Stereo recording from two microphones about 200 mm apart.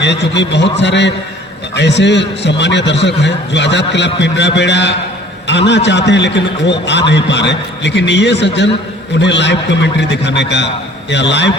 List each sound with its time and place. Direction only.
0.0 s a man's voice: 60° left (ahead or behind)